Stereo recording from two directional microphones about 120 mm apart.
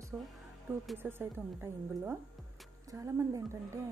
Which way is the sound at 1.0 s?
20° right (ahead or behind).